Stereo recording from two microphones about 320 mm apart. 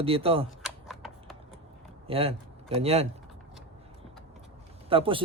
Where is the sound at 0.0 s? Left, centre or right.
Centre.